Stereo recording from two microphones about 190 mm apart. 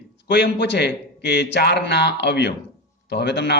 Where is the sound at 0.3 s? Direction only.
65° left (ahead or behind).